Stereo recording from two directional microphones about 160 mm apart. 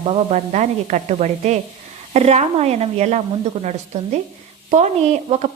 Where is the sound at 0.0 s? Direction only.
40° right (ahead or behind).